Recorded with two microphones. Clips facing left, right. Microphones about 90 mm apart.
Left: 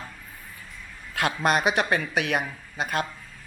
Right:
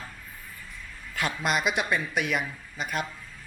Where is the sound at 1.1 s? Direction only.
50° left (ahead or behind).